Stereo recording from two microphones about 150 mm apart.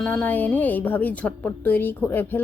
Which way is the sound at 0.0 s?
10° left (ahead or behind).